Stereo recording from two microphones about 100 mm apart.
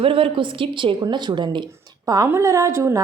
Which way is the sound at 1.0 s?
50° right (ahead or behind).